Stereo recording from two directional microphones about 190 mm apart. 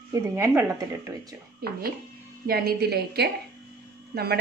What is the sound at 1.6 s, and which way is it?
A woman's voice, 55° right (ahead or behind).